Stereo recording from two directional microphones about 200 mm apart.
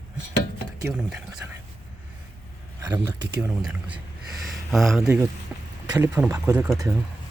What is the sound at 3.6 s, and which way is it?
Speech, 5° right (ahead or behind).